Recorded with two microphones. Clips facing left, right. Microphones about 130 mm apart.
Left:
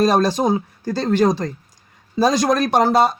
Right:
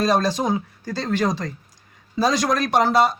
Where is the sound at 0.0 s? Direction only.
50° left (ahead or behind).